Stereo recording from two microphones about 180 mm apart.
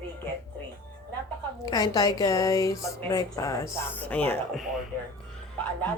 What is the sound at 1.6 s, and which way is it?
A woman's voice, 20° left (ahead or behind).